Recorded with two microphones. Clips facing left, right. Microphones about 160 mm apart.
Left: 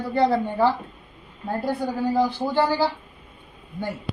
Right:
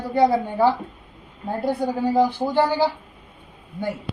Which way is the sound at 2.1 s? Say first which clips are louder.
Right 3 dB; 15° right (ahead or behind).